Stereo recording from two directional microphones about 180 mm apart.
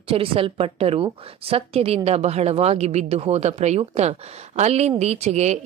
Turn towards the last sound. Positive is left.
turn(degrees=-40)  # may be behind; listen again after turning